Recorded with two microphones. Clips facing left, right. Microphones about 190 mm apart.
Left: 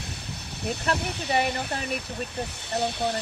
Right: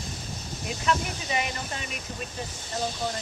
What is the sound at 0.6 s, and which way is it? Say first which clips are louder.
Speech: even; 65° left (ahead or behind).